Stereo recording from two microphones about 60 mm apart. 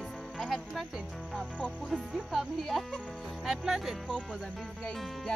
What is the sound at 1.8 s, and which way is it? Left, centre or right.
Speech, centre.